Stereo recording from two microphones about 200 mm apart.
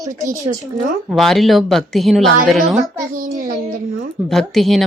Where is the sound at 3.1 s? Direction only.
40° right (ahead or behind).